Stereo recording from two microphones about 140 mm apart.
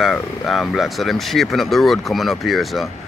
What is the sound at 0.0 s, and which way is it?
Speech, centre (ahead or behind).